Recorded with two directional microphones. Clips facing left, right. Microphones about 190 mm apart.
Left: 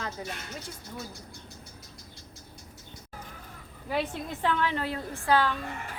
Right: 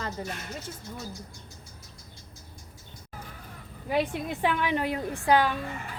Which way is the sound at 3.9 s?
15° right (ahead or behind).